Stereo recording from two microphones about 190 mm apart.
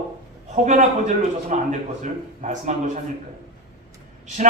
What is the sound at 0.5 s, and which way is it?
A man's voice, 40° right (ahead or behind).